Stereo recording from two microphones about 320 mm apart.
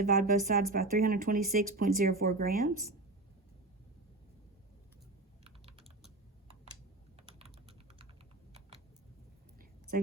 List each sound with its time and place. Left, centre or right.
0.0 s speech: right
7.2 s typing: centre